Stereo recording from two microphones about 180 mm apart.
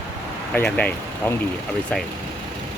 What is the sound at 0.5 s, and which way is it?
Speech, 5° left (ahead or behind).